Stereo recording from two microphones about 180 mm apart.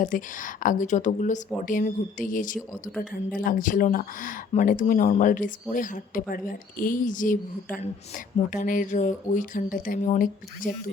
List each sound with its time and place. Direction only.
0.0 s speech: 45° left (ahead or behind)